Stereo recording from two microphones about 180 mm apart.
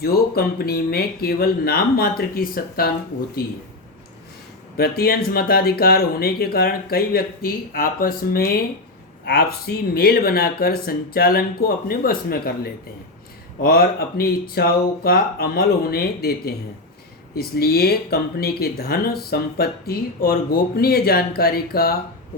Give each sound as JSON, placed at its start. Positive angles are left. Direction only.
{"t": 0.0, "sound": "speech", "side_deg": 60}
{"t": 4.8, "sound": "speech", "side_deg": 60}
{"t": 13.6, "sound": "speech", "side_deg": 55}